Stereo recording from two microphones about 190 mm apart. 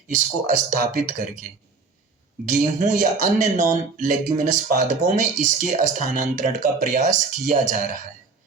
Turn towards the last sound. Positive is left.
turn(degrees=-40)  # may be behind; listen again after turning